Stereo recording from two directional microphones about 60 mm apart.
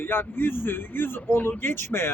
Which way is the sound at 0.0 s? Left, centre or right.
Left.